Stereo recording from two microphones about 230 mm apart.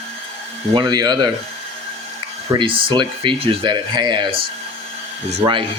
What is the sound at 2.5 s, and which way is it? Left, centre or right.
Speech, right.